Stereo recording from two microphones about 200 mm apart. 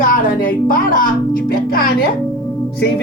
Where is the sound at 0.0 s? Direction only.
45° left (ahead or behind).